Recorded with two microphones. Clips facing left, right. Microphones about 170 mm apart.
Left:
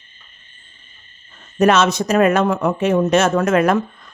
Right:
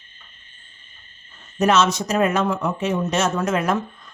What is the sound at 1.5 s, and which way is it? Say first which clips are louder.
Speech: left 4 dB; 60° left (ahead or behind).